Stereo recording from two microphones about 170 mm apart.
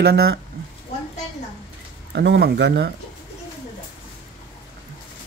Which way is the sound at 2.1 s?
80° right.